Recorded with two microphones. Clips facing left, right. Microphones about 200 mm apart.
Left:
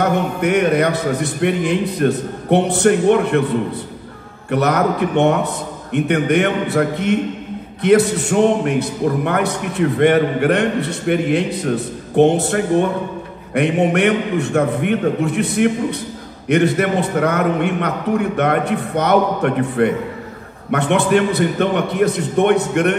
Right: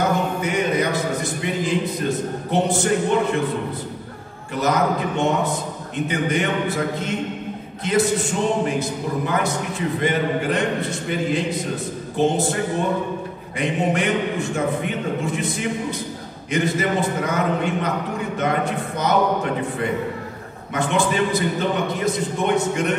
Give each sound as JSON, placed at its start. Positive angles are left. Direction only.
{"t": 0.0, "sound": "a man's voice", "side_deg": 65}
{"t": 4.5, "sound": "a man's voice", "side_deg": 65}